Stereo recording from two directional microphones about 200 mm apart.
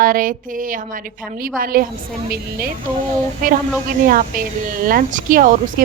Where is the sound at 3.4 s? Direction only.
45° right (ahead or behind).